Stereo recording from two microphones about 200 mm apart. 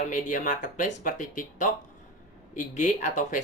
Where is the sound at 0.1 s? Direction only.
40° left (ahead or behind).